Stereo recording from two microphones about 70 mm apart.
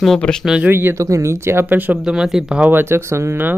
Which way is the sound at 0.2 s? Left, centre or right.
Centre.